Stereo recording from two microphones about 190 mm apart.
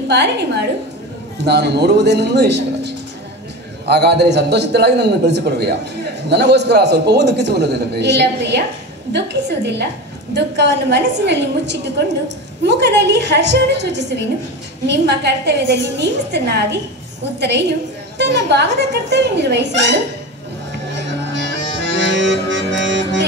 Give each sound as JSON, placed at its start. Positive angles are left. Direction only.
{"t": 0.1, "sound": "a man's voice", "side_deg": -60}
{"t": 21.4, "sound": "music", "side_deg": -65}